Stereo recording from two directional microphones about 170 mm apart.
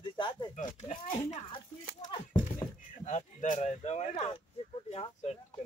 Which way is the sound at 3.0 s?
45° left (ahead or behind).